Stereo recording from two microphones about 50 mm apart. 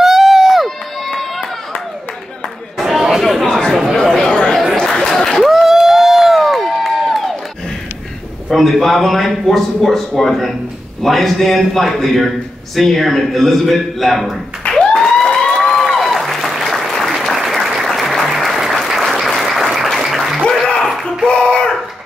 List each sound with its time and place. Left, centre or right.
0.0 s crowd: centre
2.8 s chatter: centre
3.4 s chatter: centre
5.5 s crowd: centre
8.5 s a man's voice: centre
14.7 s a sound: centre
15.7 s applause: centre
20.3 s a sound: centre
21.3 s a sound: centre